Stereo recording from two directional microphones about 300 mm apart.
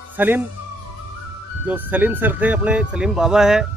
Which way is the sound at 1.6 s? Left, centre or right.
Centre.